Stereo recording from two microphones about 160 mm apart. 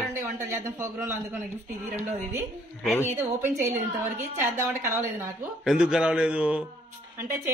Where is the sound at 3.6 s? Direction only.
45° right (ahead or behind).